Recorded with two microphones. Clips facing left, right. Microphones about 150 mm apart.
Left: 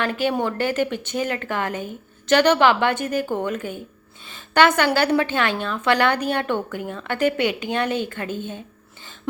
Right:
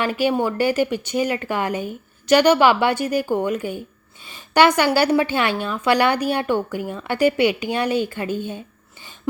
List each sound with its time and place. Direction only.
0.0 s a woman's voice: 10° right (ahead or behind)